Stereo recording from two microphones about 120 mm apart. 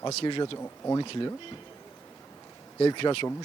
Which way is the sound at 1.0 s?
45° left (ahead or behind).